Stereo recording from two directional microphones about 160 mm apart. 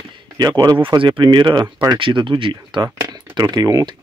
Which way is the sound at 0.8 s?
30° right (ahead or behind).